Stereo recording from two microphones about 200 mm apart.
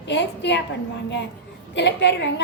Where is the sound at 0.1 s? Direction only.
60° left (ahead or behind).